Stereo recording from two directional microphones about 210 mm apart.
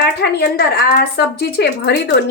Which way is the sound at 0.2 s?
50° left (ahead or behind).